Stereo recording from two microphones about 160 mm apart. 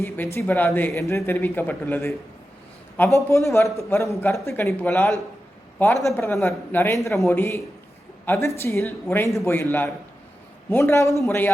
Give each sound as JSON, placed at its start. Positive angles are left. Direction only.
{"t": 0.3, "sound": "speech", "side_deg": 10}